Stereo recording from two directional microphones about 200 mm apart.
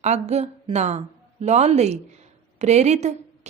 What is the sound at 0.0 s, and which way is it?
A woman's voice, 35° right (ahead or behind).